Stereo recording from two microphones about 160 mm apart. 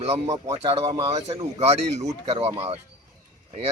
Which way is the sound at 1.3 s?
45° right (ahead or behind).